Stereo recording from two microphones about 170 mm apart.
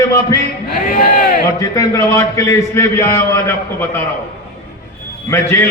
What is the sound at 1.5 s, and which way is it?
A man's voice, 20° left (ahead or behind).